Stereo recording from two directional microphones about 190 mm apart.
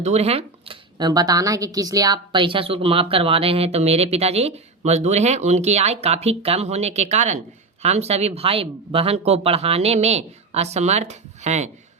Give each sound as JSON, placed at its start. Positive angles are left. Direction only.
{"t": 0.0, "sound": "speech", "side_deg": -35}